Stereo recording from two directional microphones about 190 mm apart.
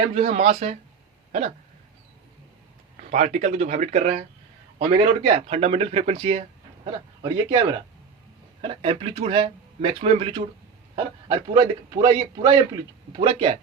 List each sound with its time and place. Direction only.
0.1 s speech: 35° right (ahead or behind)
1.3 s hiccup: 35° right (ahead or behind)
3.0 s speech: 40° right (ahead or behind)